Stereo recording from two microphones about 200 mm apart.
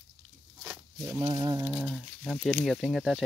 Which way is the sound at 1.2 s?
20° right (ahead or behind).